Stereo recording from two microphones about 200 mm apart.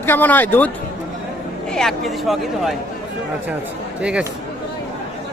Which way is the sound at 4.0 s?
5° right (ahead or behind).